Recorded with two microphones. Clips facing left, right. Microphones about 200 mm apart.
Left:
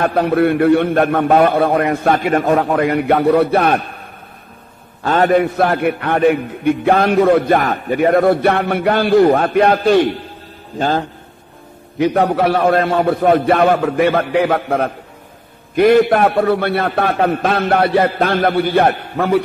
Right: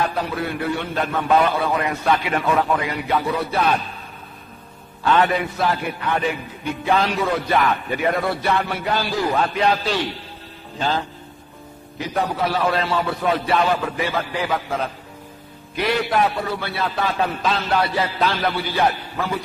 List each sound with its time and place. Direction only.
0.0 s a man's voice: 60° left (ahead or behind)
5.0 s a man's voice: 45° left (ahead or behind)
12.0 s a man's voice: 60° left (ahead or behind)